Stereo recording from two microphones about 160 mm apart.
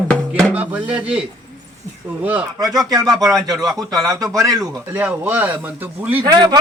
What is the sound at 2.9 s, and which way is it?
Speech, 25° right (ahead or behind).